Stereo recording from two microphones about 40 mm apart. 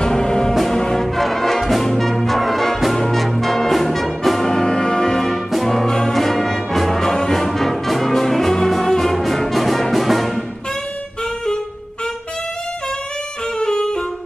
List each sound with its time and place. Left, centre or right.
0.0 s music: centre
0.9 s brass instrument: centre
4.5 s music: centre
5.5 s brass instrument: centre
13.6 s saxophone: centre